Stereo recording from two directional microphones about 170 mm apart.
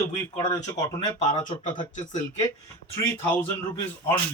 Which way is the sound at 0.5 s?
20° left (ahead or behind).